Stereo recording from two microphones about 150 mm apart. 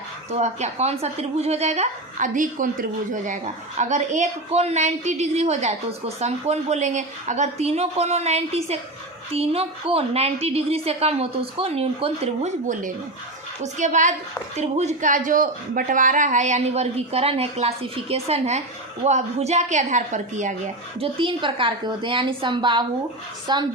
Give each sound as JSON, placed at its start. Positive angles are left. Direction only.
{"t": 0.3, "sound": "a woman's voice", "side_deg": -50}
{"t": 21.0, "sound": "a woman's voice", "side_deg": -35}